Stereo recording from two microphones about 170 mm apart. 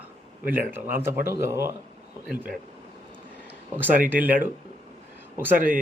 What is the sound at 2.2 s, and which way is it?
Speech, 5° right (ahead or behind).